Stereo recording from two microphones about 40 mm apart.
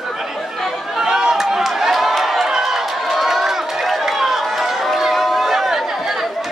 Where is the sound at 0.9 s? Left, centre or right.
Centre.